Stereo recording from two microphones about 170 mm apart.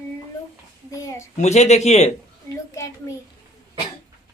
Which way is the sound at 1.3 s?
40° left (ahead or behind).